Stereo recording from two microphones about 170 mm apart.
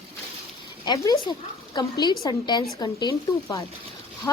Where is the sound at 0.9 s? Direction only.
20° left (ahead or behind).